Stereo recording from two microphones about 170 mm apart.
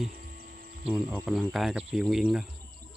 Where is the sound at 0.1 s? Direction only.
55° right (ahead or behind).